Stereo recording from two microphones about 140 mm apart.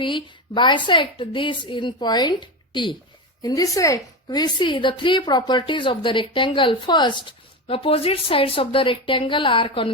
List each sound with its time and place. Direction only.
0.0 s a woman's voice: 35° left (ahead or behind)